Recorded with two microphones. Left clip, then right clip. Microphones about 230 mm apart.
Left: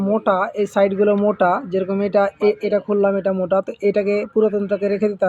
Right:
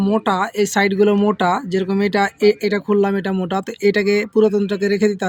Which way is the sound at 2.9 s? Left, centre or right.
Right.